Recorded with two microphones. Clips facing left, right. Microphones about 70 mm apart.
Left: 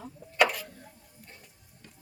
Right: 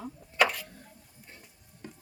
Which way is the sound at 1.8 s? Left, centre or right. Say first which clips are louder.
Right 10 dB; right.